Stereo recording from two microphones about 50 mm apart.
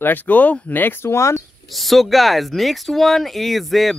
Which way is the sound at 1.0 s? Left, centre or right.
Left.